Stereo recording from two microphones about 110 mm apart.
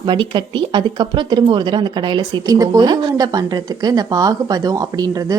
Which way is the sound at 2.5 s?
35° right (ahead or behind).